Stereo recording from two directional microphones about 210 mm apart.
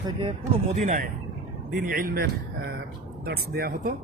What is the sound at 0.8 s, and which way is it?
Speech, 40° right (ahead or behind).